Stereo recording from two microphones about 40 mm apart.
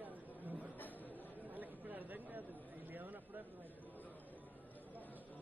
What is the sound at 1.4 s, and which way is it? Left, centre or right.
Chatter, right.